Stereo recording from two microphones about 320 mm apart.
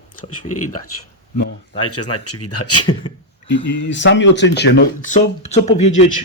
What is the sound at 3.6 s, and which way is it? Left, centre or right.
Speech, left.